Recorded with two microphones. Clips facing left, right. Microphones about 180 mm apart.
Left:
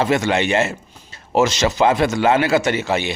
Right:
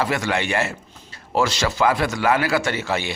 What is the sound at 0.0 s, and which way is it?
A man's voice, 25° left (ahead or behind).